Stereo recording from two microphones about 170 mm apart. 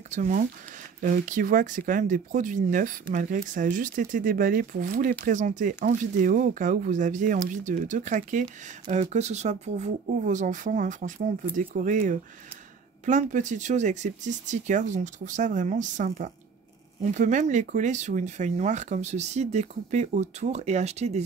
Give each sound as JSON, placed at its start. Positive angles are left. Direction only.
{"t": 0.1, "sound": "speech", "side_deg": -45}